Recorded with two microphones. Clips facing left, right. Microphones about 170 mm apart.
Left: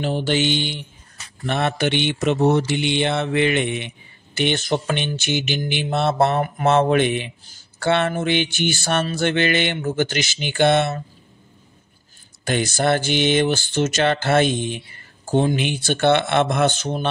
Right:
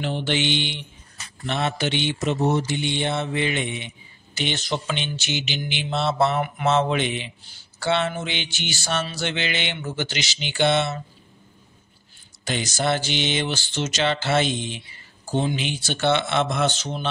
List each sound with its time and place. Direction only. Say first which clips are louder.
0.0 s mantra: left 4 dB; 40° left (ahead or behind)
1.4 s speech: left 4 dB; 55° left (ahead or behind)
4.4 s mantra: left 6 dB; 55° left (ahead or behind)
12.4 s mantra: left 4 dB; 55° left (ahead or behind)